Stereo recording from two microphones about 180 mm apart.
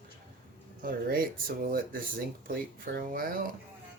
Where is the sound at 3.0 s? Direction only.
55° right (ahead or behind).